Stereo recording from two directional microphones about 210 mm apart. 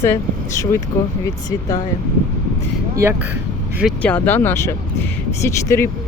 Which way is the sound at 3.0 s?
10° right (ahead or behind).